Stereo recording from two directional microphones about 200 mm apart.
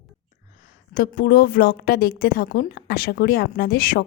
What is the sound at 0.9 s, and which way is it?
Speech, 50° left (ahead or behind).